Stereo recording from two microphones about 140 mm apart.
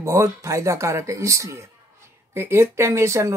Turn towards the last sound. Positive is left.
turn(degrees=-20)  # may be behind; listen again after turning